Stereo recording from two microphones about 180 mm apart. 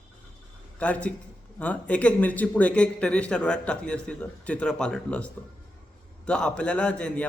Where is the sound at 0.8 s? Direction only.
5° left (ahead or behind).